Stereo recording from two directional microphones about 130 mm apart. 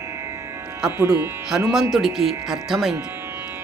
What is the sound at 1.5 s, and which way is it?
A woman's voice, centre (ahead or behind).